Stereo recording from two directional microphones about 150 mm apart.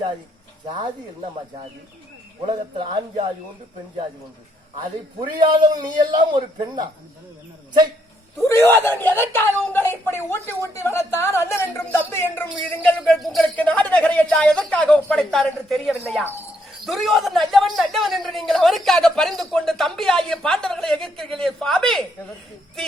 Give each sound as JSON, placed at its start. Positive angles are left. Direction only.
{"t": 0.6, "sound": "a man's voice", "side_deg": -35}
{"t": 2.5, "sound": "a man's voice", "side_deg": -35}
{"t": 4.8, "sound": "a man's voice", "side_deg": -30}
{"t": 8.4, "sound": "a woman's voice", "side_deg": 15}
{"t": 16.2, "sound": "a woman's voice", "side_deg": 15}
{"t": 16.8, "sound": "speech", "side_deg": 0}